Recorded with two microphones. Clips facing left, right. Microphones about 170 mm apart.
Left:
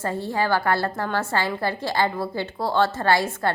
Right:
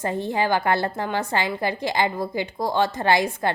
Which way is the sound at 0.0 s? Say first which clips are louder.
Right 1 dB; 20° right (ahead or behind).